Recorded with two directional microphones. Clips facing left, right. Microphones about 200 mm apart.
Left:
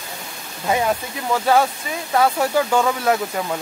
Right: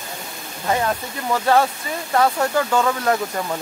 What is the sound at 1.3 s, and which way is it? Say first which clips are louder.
Speech: even; 5° left (ahead or behind).